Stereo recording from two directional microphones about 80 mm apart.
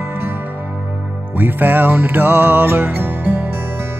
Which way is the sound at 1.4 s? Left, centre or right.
Right.